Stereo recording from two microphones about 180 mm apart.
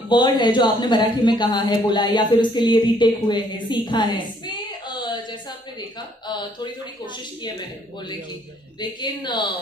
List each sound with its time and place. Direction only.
0.1 s speech: 25° left (ahead or behind)
9.0 s speech: 25° left (ahead or behind)